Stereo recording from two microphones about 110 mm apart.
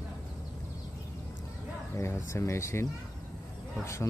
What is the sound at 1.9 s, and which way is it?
Speech, 25° left (ahead or behind).